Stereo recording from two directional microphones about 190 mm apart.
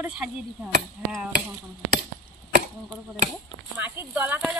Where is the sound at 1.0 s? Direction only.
10° right (ahead or behind).